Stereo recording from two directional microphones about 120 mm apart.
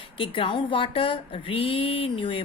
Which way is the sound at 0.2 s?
45° left (ahead or behind).